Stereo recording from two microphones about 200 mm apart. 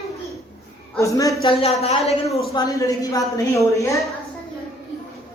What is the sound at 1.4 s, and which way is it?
Speech, 30° left (ahead or behind).